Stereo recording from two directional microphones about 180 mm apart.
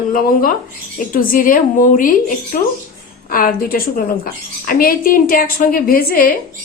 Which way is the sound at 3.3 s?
55° left (ahead or behind).